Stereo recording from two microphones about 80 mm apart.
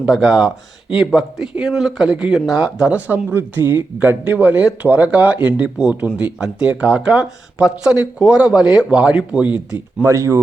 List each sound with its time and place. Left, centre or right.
0.0 s speech: centre
3.3 s speech: right
10.0 s speech: right